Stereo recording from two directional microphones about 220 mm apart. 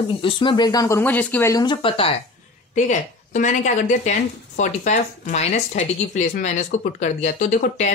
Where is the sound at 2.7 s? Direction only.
35° left (ahead or behind).